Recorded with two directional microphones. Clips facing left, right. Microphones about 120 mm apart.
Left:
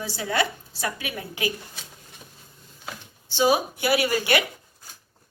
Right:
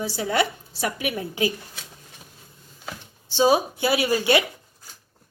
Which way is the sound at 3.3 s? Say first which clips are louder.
Right 2 dB; 30° right (ahead or behind).